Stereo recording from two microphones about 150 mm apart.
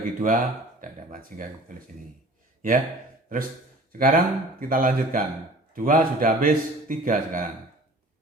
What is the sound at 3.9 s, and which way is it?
A man's voice, 70° right (ahead or behind).